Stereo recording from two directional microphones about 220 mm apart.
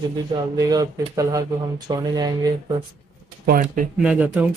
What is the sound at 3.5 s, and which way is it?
Speech, 40° right (ahead or behind).